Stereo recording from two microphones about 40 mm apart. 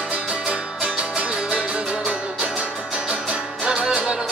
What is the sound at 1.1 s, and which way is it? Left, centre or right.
Music, right.